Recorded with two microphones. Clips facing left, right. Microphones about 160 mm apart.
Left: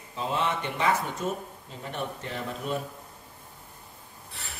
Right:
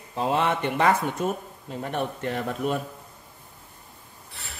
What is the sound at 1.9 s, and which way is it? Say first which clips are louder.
Speech: right 6 dB; 60° right (ahead or behind).